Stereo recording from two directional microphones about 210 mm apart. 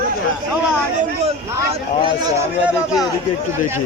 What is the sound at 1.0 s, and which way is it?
Speech, 30° right (ahead or behind).